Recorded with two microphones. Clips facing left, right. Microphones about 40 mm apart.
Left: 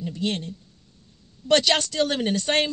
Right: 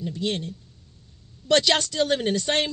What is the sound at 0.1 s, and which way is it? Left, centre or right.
Speech, left.